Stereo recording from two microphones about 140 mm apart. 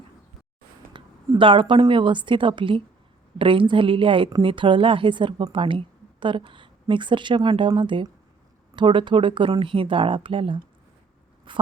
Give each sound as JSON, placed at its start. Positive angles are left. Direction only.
{"t": 0.9, "sound": "a woman's voice", "side_deg": -35}